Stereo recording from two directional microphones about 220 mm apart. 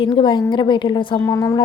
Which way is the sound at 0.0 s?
20° left (ahead or behind).